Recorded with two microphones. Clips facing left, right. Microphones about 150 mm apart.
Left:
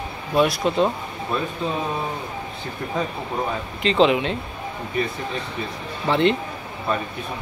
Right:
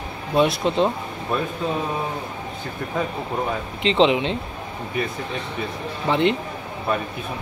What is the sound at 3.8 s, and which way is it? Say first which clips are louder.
Speech: even; 20° right (ahead or behind).